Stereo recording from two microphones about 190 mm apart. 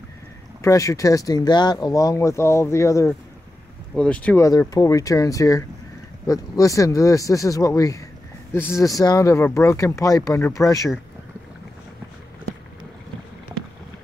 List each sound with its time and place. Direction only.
0.6 s speech: 15° left (ahead or behind)
4.5 s speech: 15° left (ahead or behind)